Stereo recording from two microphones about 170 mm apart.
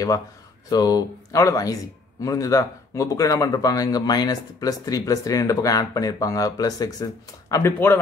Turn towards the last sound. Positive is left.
turn(degrees=15)  # may be behind; listen again after turning